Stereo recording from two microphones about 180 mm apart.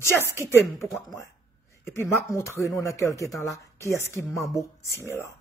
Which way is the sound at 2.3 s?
20° left (ahead or behind).